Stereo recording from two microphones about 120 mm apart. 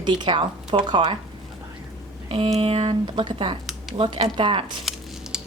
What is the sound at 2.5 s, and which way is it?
Speech, 50° right (ahead or behind).